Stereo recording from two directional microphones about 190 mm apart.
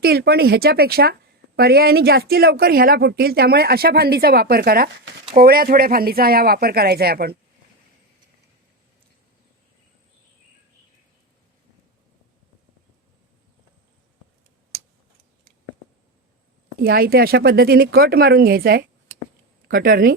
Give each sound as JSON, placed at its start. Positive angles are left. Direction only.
{"t": 0.0, "sound": "speech", "side_deg": -55}
{"t": 16.8, "sound": "speech", "side_deg": -50}